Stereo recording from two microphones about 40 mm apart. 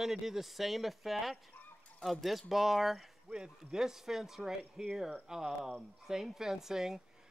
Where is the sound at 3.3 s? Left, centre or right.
Right.